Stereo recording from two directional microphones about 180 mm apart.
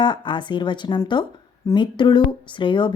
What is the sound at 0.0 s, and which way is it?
A woman's voice, 25° left (ahead or behind).